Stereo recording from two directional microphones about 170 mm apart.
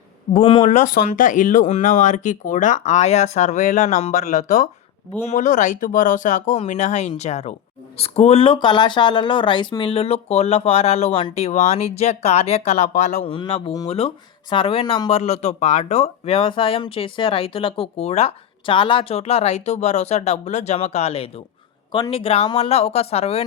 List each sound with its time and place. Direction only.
0.3 s speech: 30° left (ahead or behind)
0.6 s speech: 45° left (ahead or behind)
13.2 s speech: 30° left (ahead or behind)